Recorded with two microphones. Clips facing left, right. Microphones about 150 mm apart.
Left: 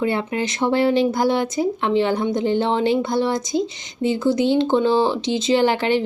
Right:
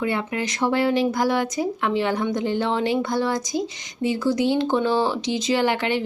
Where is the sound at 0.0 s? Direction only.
30° left (ahead or behind).